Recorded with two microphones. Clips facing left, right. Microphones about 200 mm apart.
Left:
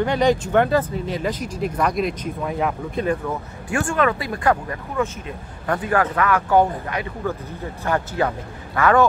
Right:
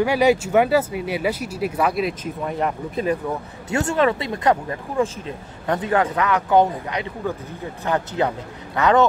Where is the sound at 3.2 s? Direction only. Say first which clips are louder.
Even; 25° right (ahead or behind).